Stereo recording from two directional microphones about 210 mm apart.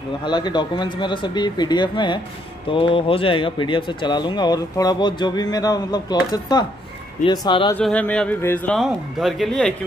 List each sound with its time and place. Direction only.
0.2 s speech: 20° left (ahead or behind)
7.2 s speech: 20° left (ahead or behind)
7.7 s a man's voice: 5° left (ahead or behind)